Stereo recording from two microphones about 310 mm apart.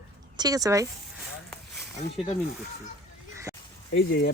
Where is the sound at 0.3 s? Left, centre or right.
Centre.